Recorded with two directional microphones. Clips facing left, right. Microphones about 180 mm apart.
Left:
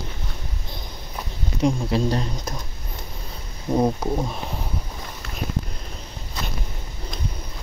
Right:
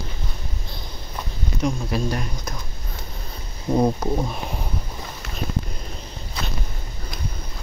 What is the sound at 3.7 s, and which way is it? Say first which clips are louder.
Speech: right 1 dB; centre (ahead or behind).